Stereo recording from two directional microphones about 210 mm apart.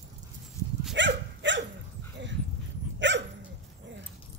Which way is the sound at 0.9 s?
60° right (ahead or behind).